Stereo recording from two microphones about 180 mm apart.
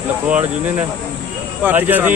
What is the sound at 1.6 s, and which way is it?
Speech, 10° right (ahead or behind).